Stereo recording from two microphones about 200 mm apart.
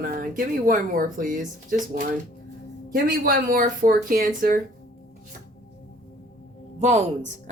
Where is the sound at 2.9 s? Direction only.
45° right (ahead or behind).